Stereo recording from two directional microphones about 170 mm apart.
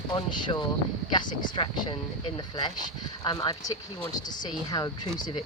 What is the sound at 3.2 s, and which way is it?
Speech, 25° left (ahead or behind).